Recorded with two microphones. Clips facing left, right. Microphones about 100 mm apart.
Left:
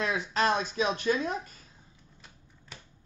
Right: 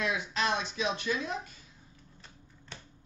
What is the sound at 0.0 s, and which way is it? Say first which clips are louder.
Speech: left 4 dB; 40° left (ahead or behind).